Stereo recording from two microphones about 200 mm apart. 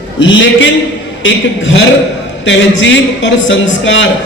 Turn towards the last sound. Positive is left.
turn(degrees=65)  # may be behind; listen again after turning